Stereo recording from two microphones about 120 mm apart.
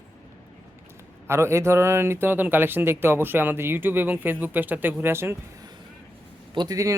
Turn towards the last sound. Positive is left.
turn(degrees=-30)  # may be behind; listen again after turning